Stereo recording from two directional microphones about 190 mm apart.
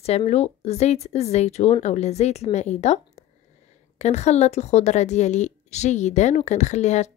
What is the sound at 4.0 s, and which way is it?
A woman's voice, 35° left (ahead or behind).